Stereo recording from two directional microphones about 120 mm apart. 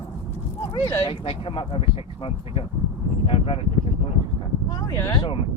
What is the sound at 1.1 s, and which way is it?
Speech, 45° left (ahead or behind).